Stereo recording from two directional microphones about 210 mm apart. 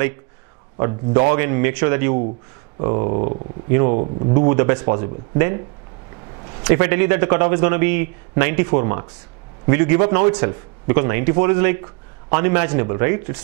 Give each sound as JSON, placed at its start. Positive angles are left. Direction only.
{"t": 0.7, "sound": "a man's voice", "side_deg": -15}
{"t": 3.1, "sound": "speech", "side_deg": -35}
{"t": 4.3, "sound": "a man's voice", "side_deg": -15}
{"t": 6.6, "sound": "a man's voice", "side_deg": -15}